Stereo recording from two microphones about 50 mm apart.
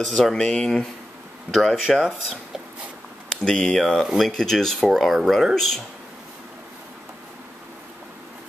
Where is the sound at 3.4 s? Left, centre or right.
Centre.